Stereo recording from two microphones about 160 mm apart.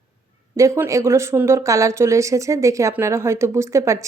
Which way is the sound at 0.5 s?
20° right (ahead or behind).